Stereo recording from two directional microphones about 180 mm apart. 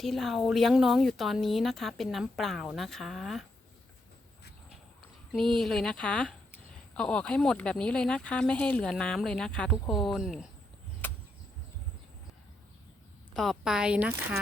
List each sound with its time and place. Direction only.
0.0 s speech: centre (ahead or behind)
5.3 s speech: centre (ahead or behind)
11.0 s a sound: 10° left (ahead or behind)
13.3 s speech: centre (ahead or behind)